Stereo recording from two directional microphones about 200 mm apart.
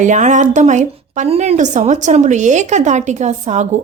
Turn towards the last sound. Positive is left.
turn(degrees=-35)  # may be behind; listen again after turning